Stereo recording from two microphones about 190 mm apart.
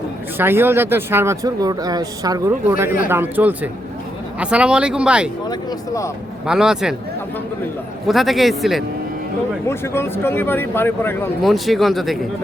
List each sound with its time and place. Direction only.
0.3 s speech: 10° right (ahead or behind)
5.5 s speech: 15° left (ahead or behind)
6.4 s speech: 5° right (ahead or behind)
8.0 s speech: centre (ahead or behind)
9.6 s speech: 15° left (ahead or behind)
11.4 s speech: centre (ahead or behind)